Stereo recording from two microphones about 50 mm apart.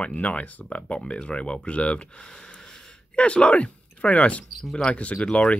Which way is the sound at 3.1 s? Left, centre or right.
Left.